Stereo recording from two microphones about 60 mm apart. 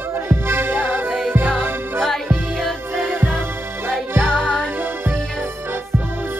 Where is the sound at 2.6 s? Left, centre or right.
Centre.